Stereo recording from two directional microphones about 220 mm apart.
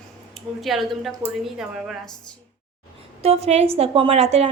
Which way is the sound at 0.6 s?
Centre (ahead or behind).